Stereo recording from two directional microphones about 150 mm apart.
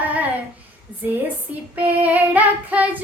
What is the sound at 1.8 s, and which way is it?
A woman's voice, 10° right (ahead or behind).